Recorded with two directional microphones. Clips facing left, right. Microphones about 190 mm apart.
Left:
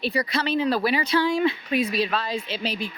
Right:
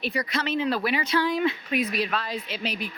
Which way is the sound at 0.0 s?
30° left (ahead or behind).